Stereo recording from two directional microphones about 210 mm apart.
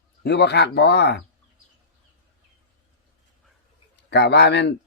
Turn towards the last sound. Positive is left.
turn(degrees=55)  # may be behind; listen again after turning